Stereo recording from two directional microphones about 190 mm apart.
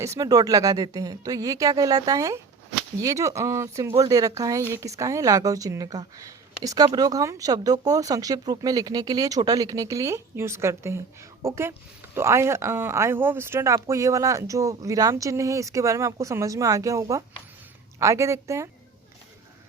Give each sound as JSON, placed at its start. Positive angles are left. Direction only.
{"t": 0.0, "sound": "speech", "side_deg": -15}